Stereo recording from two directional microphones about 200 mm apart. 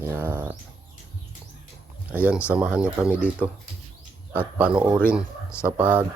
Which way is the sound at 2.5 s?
5° right (ahead or behind).